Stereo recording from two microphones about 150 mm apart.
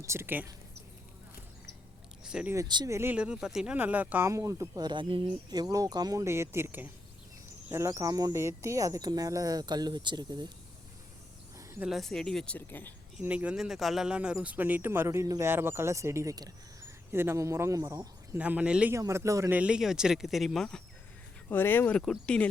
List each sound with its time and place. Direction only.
0.0 s speech: 15° right (ahead or behind)
2.2 s a sound: 5° right (ahead or behind)
2.5 s speech: 25° right (ahead or behind)
11.8 s speech: centre (ahead or behind)
13.1 s speech: 10° right (ahead or behind)
18.3 s speech: 10° right (ahead or behind)
18.9 s speech: 20° right (ahead or behind); by 20.8 s 5° left (ahead or behind)
21.5 s speech: 15° left (ahead or behind)